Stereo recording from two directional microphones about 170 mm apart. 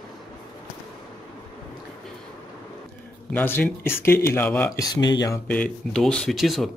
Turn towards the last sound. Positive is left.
turn(degrees=0)  # may be behind; listen again after turning